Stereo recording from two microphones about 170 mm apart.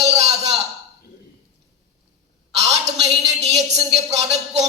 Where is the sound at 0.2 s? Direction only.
40° right (ahead or behind).